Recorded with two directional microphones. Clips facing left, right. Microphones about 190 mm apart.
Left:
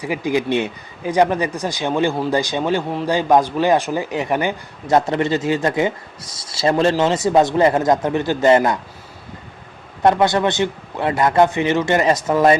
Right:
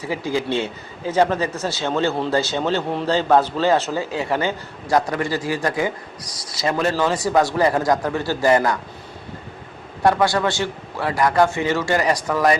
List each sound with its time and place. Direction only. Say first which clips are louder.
0.0 s a man's voice: left 3 dB; 15° left (ahead or behind)
10.0 s a man's voice: left 2 dB; 20° left (ahead or behind)